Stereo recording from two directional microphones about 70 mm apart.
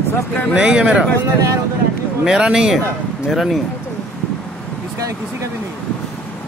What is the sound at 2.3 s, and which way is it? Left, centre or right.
Speech, centre.